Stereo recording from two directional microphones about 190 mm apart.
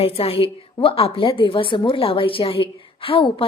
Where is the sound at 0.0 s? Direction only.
30° left (ahead or behind).